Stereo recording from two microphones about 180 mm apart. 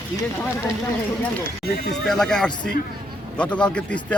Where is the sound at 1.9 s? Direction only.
5° left (ahead or behind).